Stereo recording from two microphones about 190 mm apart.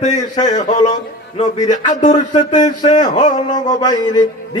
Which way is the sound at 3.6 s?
20° left (ahead or behind).